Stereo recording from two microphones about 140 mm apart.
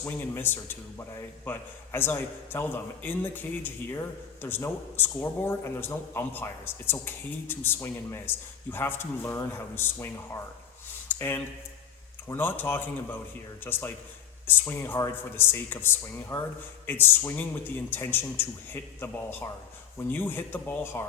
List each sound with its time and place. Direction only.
0.0 s a man's voice: 15° left (ahead or behind)